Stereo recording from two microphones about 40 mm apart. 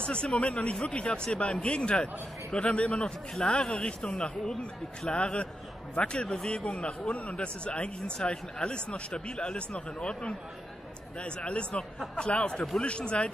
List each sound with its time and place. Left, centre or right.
0.0 s speech: left
5.1 s speech: left